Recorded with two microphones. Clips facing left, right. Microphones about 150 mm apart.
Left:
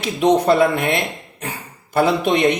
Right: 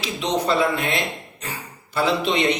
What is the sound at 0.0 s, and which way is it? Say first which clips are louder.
A man's voice: left 8 dB; 55° left (ahead or behind).